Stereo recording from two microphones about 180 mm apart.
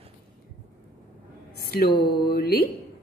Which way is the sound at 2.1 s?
60° left (ahead or behind).